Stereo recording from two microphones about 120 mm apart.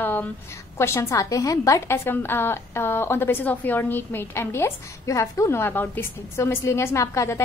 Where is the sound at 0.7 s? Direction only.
20° left (ahead or behind).